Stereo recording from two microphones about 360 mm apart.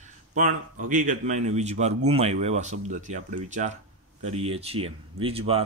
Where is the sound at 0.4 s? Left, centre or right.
Right.